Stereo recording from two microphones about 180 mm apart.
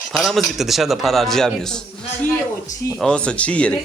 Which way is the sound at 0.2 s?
Centre (ahead or behind).